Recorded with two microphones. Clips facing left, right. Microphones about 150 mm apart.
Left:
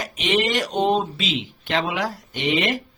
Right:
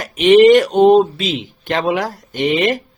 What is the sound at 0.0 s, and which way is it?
Speech, 55° right (ahead or behind).